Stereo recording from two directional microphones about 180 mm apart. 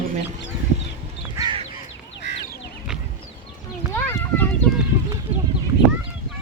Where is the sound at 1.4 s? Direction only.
25° right (ahead or behind).